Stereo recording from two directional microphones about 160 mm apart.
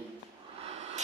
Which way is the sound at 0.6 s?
40° right (ahead or behind).